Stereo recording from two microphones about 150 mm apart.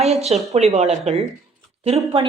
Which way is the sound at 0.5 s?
45° right (ahead or behind).